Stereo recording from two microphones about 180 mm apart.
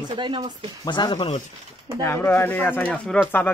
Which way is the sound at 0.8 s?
25° left (ahead or behind).